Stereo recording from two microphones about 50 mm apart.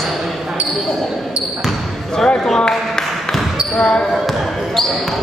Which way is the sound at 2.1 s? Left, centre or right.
Centre.